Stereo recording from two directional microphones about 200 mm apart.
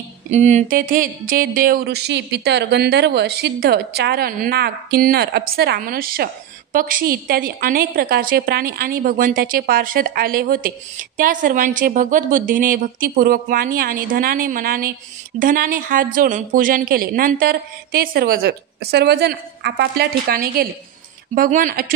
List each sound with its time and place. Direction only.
0.3 s speech: 35° right (ahead or behind)